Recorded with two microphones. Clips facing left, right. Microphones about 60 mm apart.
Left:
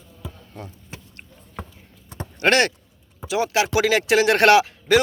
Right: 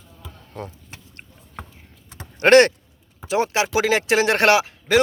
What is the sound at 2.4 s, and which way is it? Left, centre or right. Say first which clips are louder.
Speech: right 6 dB; right.